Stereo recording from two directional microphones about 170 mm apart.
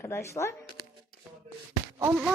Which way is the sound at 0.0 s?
15° left (ahead or behind).